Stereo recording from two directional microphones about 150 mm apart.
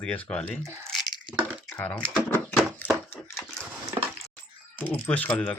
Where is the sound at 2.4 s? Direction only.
10° left (ahead or behind).